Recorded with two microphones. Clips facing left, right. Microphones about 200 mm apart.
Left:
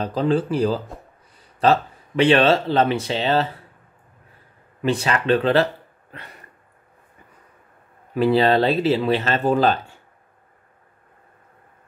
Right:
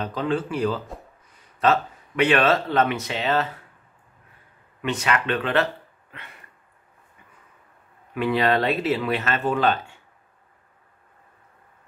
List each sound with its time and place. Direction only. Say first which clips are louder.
0.0 s speech: left 5 dB; 35° left (ahead or behind)
4.8 s speech: left 4 dB; 30° left (ahead or behind)
6.1 s a sound: left 4 dB; 40° left (ahead or behind)
8.1 s speech: left 5 dB; 30° left (ahead or behind)